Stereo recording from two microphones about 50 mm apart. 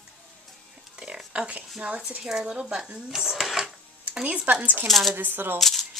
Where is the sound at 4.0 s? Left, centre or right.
Right.